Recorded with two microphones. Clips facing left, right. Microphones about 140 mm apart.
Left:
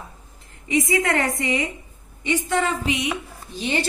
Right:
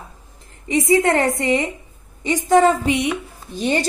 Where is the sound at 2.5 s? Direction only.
40° right (ahead or behind).